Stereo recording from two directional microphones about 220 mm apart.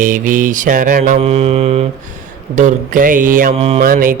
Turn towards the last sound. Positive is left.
turn(degrees=-40)  # may be behind; listen again after turning